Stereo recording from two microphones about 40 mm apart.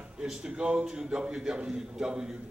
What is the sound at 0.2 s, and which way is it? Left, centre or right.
A man's voice, centre.